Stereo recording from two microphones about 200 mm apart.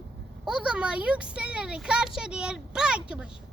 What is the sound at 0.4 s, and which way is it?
Speech, 5° right (ahead or behind).